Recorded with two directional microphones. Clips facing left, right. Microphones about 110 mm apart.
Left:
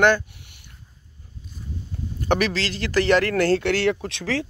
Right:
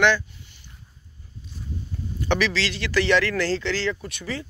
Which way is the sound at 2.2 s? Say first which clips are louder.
Left 1 dB; 45° left (ahead or behind).